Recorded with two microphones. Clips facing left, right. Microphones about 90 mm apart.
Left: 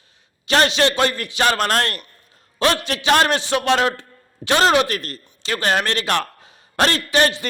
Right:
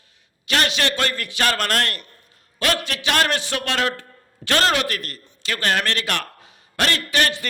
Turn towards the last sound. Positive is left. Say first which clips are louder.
# left 4 dB
turn(degrees=25)  # may be behind; listen again after turning